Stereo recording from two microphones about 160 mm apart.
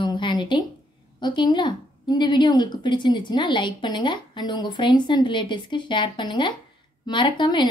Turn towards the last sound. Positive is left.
turn(degrees=30)  # may be behind; listen again after turning